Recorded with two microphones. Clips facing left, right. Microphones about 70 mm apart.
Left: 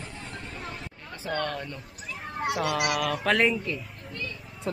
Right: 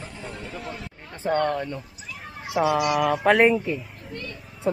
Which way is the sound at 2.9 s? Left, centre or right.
Centre.